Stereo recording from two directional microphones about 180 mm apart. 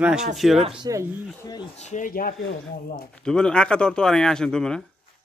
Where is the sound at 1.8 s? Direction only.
40° left (ahead or behind).